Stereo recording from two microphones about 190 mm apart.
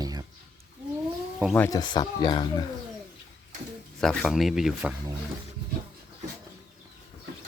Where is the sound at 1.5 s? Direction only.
10° left (ahead or behind).